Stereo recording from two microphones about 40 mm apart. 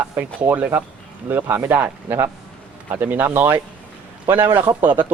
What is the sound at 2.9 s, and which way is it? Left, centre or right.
Speech, right.